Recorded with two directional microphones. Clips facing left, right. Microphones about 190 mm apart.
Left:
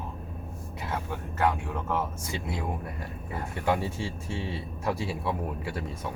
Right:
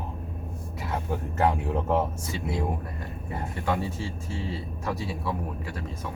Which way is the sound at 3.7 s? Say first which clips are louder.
Even; 25° left (ahead or behind).